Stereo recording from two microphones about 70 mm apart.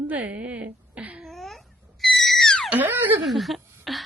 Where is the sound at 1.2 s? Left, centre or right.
Centre.